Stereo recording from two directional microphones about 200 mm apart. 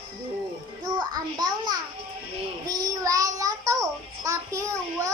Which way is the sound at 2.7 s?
20° right (ahead or behind).